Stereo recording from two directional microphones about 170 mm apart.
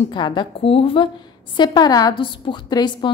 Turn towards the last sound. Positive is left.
turn(degrees=25)  # may be behind; listen again after turning